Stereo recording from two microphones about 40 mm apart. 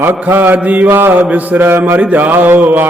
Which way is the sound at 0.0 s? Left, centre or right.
Right.